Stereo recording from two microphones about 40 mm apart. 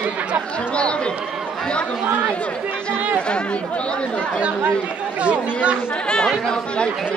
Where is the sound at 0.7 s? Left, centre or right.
Left.